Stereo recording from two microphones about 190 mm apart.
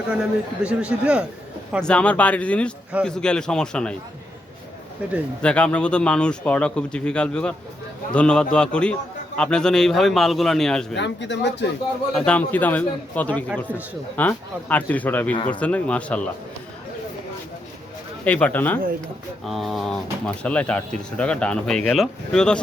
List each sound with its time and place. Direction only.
0.1 s speech: 5° right (ahead or behind)
1.7 s a man's voice: 5° left (ahead or behind)
5.4 s speech: 5° left (ahead or behind)
10.9 s speech: 65° left (ahead or behind)
12.1 s a man's voice: 5° left (ahead or behind)
18.3 s a man's voice: 5° left (ahead or behind)